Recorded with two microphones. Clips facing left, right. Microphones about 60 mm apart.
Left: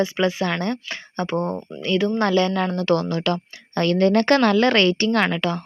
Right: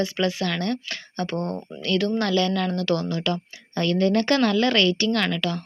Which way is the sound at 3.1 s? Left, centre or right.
Left.